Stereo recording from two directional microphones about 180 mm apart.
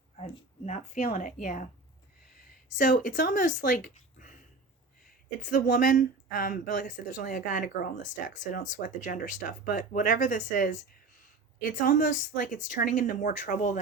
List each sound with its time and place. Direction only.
0.2 s speech: 40° left (ahead or behind)
2.7 s a woman's voice: 50° left (ahead or behind)
5.4 s a woman's voice: 45° left (ahead or behind)